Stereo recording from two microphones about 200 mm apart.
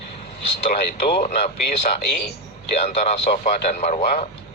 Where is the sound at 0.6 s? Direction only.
30° left (ahead or behind).